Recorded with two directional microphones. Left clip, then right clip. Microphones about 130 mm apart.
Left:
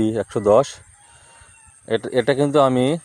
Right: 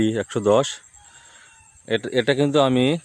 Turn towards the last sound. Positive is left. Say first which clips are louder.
# left 2 dB
turn(degrees=-5)  # may be behind; listen again after turning